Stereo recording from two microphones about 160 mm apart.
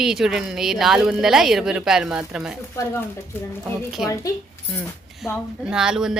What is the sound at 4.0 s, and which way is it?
Speech, 5° right (ahead or behind).